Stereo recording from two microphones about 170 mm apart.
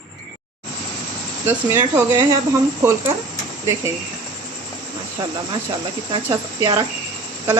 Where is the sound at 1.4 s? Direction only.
15° right (ahead or behind).